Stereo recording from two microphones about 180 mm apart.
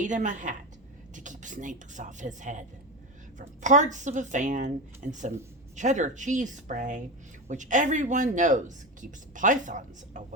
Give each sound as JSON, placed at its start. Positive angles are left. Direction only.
{"t": 0.0, "sound": "speech", "side_deg": -45}